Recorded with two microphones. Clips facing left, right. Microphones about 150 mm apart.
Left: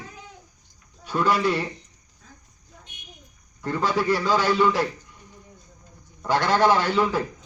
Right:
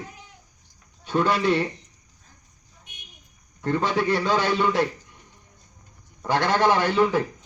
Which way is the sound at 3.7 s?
20° right (ahead or behind).